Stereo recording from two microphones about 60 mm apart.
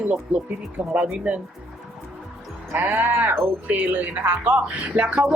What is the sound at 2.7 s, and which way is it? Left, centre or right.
Speech, right.